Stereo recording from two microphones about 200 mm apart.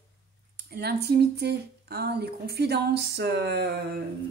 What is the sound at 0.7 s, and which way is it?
Speech, 55° right (ahead or behind).